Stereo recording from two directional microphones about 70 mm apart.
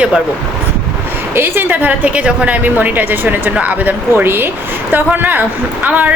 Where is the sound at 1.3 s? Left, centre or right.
Right.